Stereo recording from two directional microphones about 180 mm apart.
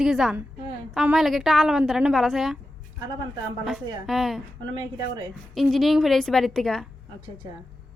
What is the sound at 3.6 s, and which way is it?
Speech, centre (ahead or behind).